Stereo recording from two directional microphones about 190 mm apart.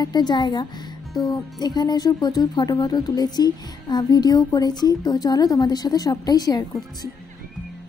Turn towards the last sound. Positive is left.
turn(degrees=20)  # may be behind; listen again after turning